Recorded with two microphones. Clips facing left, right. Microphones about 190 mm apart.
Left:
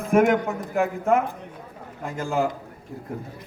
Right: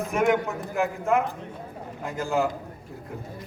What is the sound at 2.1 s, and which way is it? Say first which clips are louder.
Speech: left 1 dB; centre (ahead or behind).